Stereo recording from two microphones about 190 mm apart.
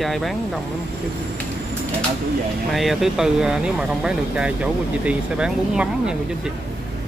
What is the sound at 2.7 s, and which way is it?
Speech, centre (ahead or behind).